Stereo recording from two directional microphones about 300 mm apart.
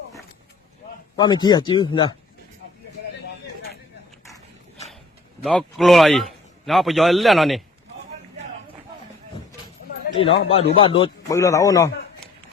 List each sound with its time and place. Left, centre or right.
1.1 s speech: centre
5.4 s a man's voice: centre
10.2 s a man's voice: centre